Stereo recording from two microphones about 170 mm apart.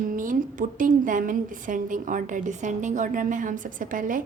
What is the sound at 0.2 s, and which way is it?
A woman's voice, 50° right (ahead or behind).